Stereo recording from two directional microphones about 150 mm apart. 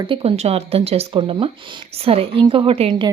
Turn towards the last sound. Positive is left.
turn(degrees=-35)  # may be behind; listen again after turning